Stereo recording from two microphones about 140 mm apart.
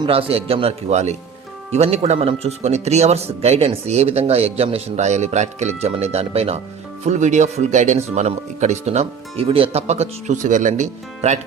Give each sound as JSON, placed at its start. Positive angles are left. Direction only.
{"t": 0.0, "sound": "speech", "side_deg": -40}